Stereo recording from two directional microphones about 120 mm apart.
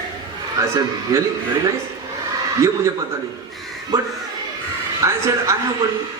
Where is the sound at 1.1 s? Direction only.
25° right (ahead or behind).